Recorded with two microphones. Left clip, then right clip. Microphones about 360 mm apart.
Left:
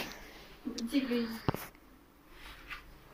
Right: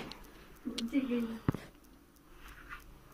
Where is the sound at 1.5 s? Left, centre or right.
Left.